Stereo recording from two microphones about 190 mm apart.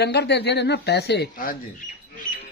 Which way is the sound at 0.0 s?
60° left (ahead or behind).